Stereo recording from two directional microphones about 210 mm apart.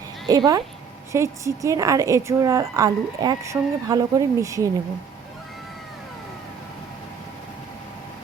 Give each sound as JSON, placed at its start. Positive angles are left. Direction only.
{"t": 0.3, "sound": "a woman's voice", "side_deg": -20}